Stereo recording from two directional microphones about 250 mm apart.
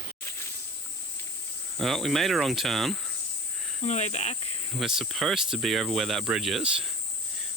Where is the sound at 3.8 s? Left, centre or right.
Left.